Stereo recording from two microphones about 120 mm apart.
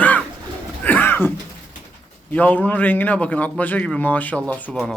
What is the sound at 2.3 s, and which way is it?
A man's voice, 15° left (ahead or behind).